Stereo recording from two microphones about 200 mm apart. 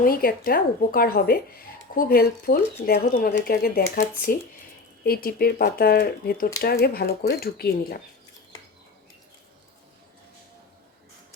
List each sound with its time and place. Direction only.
0.0 s speech: 45° left (ahead or behind)